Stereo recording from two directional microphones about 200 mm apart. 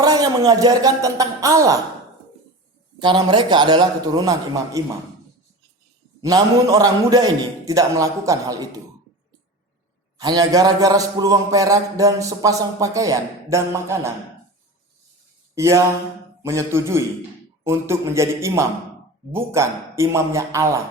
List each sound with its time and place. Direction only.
0.0 s a man's voice: 20° right (ahead or behind)
3.0 s a man's voice: 25° right (ahead or behind)
6.2 s a man's voice: 15° right (ahead or behind)
10.2 s a man's voice: 20° right (ahead or behind)
15.5 s a sound: 15° right (ahead or behind)
16.4 s a man's voice: 15° right (ahead or behind)